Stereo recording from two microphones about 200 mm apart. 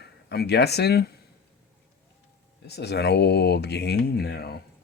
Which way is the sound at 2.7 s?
55° left (ahead or behind).